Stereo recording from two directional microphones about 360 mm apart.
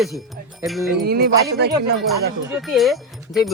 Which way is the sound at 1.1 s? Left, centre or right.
Right.